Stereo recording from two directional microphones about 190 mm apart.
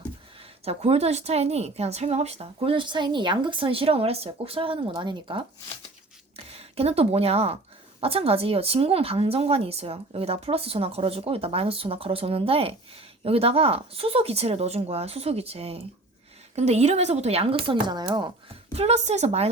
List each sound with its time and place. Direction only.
0.6 s a woman's voice: 30° right (ahead or behind)
18.7 s a woman's voice: 35° right (ahead or behind)